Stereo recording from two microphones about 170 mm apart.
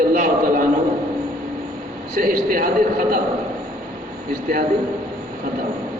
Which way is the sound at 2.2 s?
60° right (ahead or behind).